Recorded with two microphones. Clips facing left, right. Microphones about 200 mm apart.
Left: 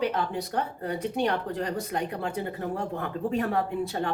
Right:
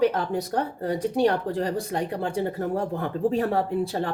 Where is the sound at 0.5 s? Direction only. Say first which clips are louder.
Right 3 dB; 35° right (ahead or behind).